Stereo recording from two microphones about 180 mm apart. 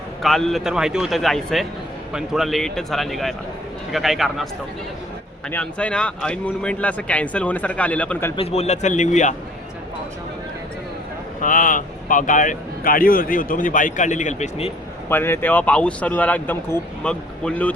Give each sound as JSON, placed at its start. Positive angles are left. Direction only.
{"t": 0.2, "sound": "a man's voice", "side_deg": 0}
{"t": 5.5, "sound": "speech", "side_deg": 5}
{"t": 8.4, "sound": "a man's voice", "side_deg": 35}
{"t": 11.3, "sound": "speech", "side_deg": 45}
{"t": 15.1, "sound": "speech", "side_deg": 10}